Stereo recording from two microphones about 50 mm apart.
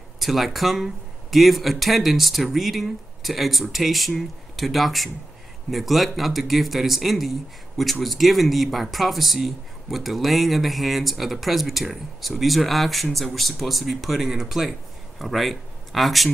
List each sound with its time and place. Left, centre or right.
0.2 s speech: centre